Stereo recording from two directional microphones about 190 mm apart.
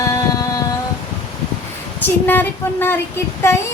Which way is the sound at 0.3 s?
20° left (ahead or behind).